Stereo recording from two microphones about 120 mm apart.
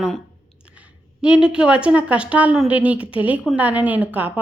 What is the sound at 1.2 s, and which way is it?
A woman's voice, 10° right (ahead or behind).